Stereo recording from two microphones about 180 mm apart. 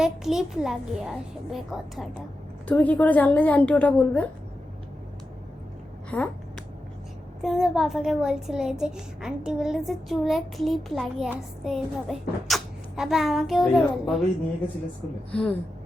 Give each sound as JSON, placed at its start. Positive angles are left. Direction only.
{"t": 0.0, "sound": "a child's voice", "side_deg": 0}
{"t": 6.1, "sound": "speech", "side_deg": 5}
{"t": 7.4, "sound": "a child's voice", "side_deg": 0}
{"t": 15.3, "sound": "a woman's voice", "side_deg": 5}